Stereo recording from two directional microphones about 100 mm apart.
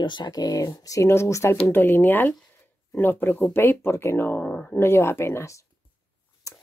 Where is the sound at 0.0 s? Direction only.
45° left (ahead or behind); by 4.7 s 10° left (ahead or behind).